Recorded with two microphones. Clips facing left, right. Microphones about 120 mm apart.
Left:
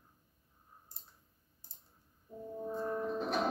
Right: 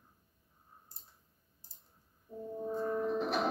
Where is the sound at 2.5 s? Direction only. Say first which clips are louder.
Right 2 dB; 5° right (ahead or behind).